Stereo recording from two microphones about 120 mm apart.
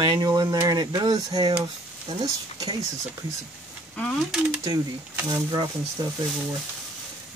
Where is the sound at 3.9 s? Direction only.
10° left (ahead or behind).